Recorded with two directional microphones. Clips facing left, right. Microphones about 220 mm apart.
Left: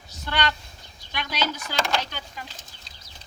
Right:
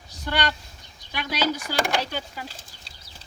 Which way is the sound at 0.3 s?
10° right (ahead or behind).